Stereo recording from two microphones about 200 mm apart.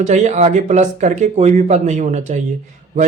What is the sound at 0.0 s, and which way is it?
Speech, 35° right (ahead or behind).